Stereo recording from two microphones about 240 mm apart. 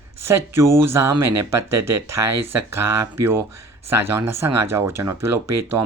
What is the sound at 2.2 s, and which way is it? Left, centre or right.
Speech, right.